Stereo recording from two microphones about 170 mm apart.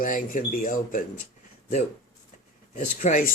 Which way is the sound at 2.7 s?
45° left (ahead or behind).